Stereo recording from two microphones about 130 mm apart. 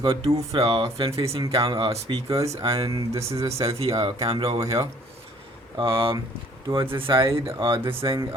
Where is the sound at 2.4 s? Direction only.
25° right (ahead or behind).